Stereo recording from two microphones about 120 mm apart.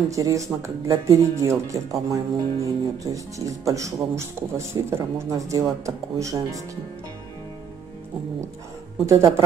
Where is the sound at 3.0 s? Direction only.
30° right (ahead or behind).